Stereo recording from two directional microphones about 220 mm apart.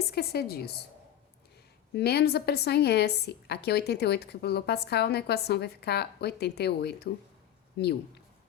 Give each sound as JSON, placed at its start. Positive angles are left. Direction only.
{"t": 0.0, "sound": "a woman's voice", "side_deg": 45}
{"t": 1.9, "sound": "a woman's voice", "side_deg": 50}